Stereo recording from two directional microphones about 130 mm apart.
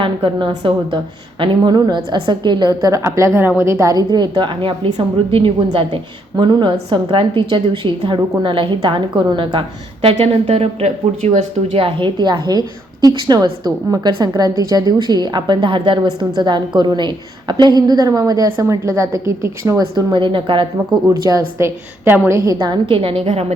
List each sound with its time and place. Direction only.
0.0 s a woman's voice: 40° right (ahead or behind)
10.8 s speech: 65° right (ahead or behind)
11.7 s a woman's voice: 40° right (ahead or behind)
21.1 s a woman's voice: 25° right (ahead or behind)
22.4 s a woman's voice: 35° right (ahead or behind); by 23.6 s 50° right (ahead or behind)